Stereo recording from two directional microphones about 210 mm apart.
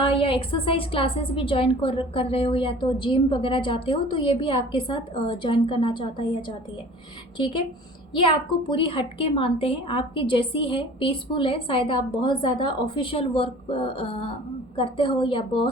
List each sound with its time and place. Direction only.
0.0 s a woman's voice: 25° left (ahead or behind)